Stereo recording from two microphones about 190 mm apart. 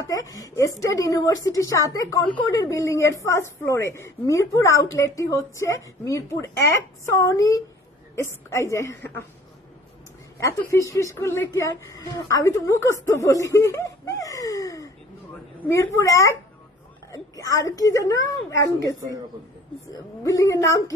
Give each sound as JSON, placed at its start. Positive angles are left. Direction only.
{"t": 0.1, "sound": "a woman's voice", "side_deg": 15}
{"t": 10.4, "sound": "a woman's voice", "side_deg": 15}
{"t": 20.2, "sound": "a woman's voice", "side_deg": 20}